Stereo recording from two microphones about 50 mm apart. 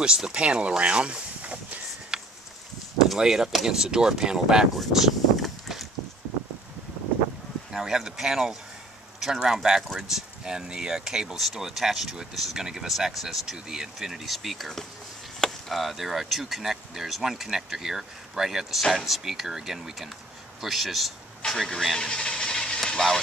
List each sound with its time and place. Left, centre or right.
0.0 s speech: centre
2.1 s a sound: centre
3.2 s speech: centre
4.7 s a sound: centre
7.7 s speech: centre
15.7 s speech: centre
21.5 s a man's voice: centre
21.9 s vehicle: centre